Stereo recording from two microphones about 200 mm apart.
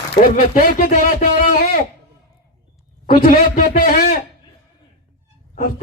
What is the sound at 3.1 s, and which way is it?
A man's voice, 45° left (ahead or behind).